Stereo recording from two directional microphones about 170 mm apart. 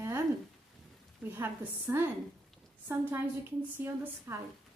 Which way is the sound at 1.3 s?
15° right (ahead or behind).